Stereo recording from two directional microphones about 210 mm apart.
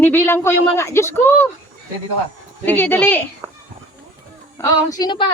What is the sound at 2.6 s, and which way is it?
Speech, 10° left (ahead or behind).